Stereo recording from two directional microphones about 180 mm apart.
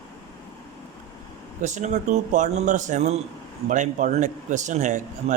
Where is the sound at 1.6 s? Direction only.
40° right (ahead or behind).